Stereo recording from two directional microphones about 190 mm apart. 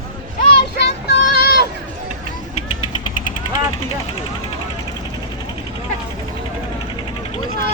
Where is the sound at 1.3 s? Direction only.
55° left (ahead or behind).